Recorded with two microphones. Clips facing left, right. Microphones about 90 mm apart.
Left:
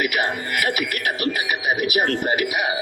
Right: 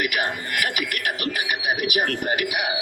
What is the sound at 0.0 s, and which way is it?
Speech, 35° left (ahead or behind).